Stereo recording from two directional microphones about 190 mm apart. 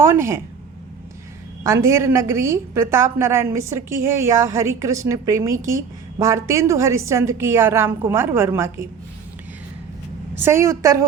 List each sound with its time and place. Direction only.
0.0 s a woman's voice: 15° right (ahead or behind)
1.6 s a woman's voice: 15° right (ahead or behind)
10.4 s a woman's voice: 15° right (ahead or behind)